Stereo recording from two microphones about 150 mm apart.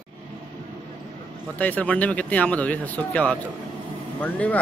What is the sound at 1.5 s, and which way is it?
Speech, 10° left (ahead or behind).